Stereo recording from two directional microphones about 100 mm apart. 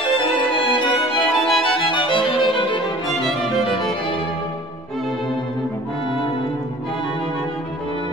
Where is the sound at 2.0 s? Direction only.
55° left (ahead or behind).